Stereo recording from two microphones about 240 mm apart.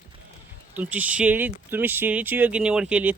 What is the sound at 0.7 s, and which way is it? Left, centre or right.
Speech, centre.